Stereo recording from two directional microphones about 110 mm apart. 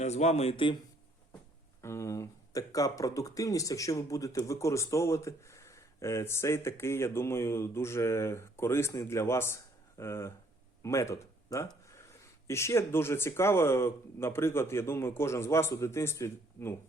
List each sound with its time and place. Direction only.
0.0 s speech: 90° left; by 0.8 s 50° left (ahead or behind)
1.8 s speech: 25° left (ahead or behind)